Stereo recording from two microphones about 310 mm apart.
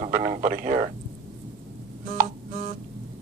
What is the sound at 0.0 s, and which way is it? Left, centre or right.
Speech, right.